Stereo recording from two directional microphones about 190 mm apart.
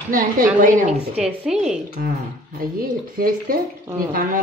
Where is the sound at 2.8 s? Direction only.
50° right (ahead or behind).